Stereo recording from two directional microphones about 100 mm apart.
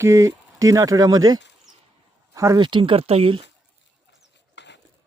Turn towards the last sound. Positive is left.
turn(degrees=-70)  # may be behind; listen again after turning